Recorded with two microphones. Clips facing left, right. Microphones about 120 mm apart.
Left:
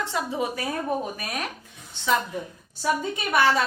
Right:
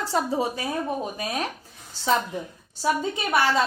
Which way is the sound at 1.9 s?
35° right (ahead or behind).